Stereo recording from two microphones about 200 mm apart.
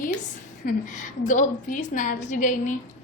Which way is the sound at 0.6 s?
40° left (ahead or behind).